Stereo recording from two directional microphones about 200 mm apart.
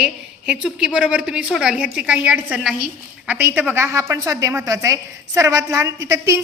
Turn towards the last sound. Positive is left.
turn(degrees=-15)  # may be behind; listen again after turning